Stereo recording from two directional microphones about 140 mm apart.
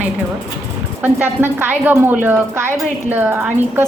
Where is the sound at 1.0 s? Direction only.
15° right (ahead or behind).